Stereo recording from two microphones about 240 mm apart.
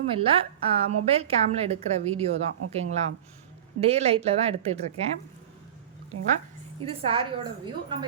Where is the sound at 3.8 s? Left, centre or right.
Right.